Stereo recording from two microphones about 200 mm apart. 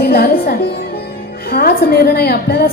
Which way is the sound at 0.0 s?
50° left (ahead or behind).